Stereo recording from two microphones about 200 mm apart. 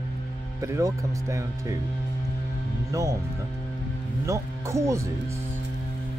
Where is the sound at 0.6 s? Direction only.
15° right (ahead or behind).